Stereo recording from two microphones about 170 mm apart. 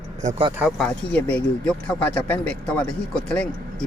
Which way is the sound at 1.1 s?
10° left (ahead or behind).